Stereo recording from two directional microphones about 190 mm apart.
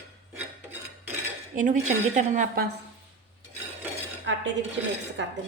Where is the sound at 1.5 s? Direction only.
40° right (ahead or behind).